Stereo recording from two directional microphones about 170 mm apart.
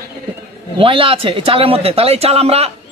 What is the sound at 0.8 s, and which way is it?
Speech, 30° right (ahead or behind).